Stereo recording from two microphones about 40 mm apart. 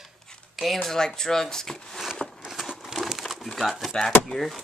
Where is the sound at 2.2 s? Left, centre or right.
Centre.